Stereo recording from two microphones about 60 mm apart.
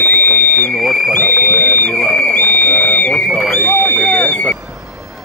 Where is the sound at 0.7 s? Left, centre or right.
Centre.